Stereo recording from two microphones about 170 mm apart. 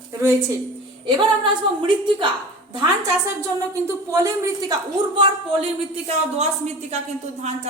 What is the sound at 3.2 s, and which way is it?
A woman's voice, 15° right (ahead or behind).